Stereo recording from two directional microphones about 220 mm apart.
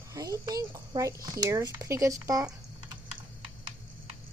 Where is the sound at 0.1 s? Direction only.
15° right (ahead or behind).